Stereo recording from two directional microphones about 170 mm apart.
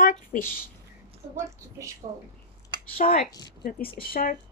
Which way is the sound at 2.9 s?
55° left (ahead or behind).